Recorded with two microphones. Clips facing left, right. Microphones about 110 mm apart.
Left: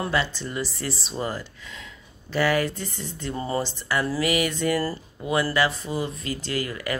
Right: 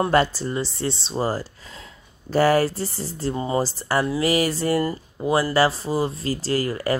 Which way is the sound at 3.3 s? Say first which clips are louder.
Right 3 dB; 20° right (ahead or behind).